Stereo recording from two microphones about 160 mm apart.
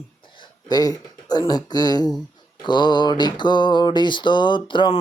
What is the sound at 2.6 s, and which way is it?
Mantra, 30° left (ahead or behind).